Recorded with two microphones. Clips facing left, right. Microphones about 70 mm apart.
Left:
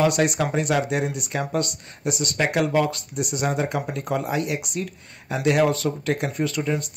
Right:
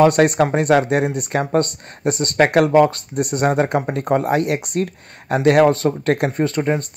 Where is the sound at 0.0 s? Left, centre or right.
Right.